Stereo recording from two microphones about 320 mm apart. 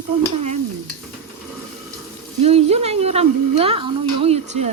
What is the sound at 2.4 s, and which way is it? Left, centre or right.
A woman's voice, centre.